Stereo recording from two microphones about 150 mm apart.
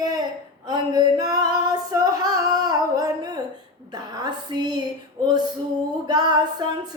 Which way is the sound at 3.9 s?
25° right (ahead or behind).